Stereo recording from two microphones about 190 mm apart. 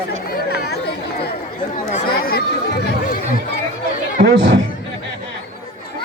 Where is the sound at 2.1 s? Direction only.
50° left (ahead or behind).